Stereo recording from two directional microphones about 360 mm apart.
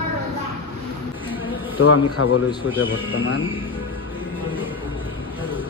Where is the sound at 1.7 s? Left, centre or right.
Left.